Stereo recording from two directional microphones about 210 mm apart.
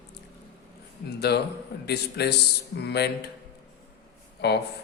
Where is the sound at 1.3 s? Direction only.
50° left (ahead or behind).